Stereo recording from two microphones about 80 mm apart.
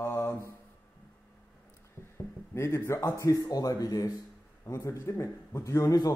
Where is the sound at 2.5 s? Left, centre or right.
Left.